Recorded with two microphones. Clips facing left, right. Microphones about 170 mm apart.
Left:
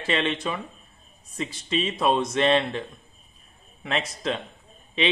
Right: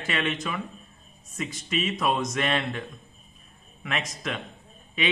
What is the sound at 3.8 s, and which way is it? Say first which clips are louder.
Speech: left 4 dB; 30° left (ahead or behind).